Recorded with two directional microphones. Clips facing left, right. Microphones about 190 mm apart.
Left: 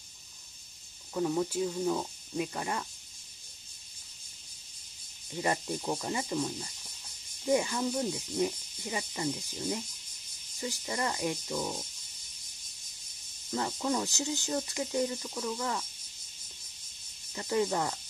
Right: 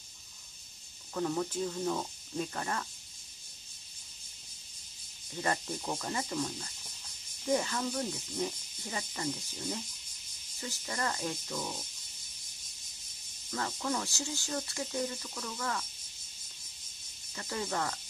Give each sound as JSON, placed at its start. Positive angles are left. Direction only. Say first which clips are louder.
{"t": 1.1, "sound": "speech", "louder": "left 3 dB", "side_deg": 10}
{"t": 5.4, "sound": "speech", "louder": "left 3 dB", "side_deg": 15}
{"t": 13.5, "sound": "speech", "louder": "left 3 dB", "side_deg": 20}
{"t": 17.3, "sound": "speech", "louder": "left 7 dB", "side_deg": 20}